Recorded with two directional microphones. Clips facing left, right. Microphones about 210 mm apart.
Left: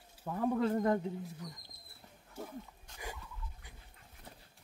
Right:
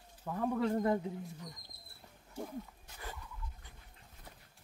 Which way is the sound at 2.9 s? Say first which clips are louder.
Left 1 dB; 5° right (ahead or behind).